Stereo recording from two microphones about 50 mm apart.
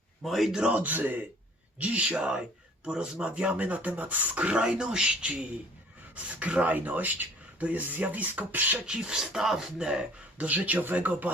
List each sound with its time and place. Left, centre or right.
0.3 s speech: centre
0.7 s speech: right
8.9 s speech: centre
10.4 s speech: right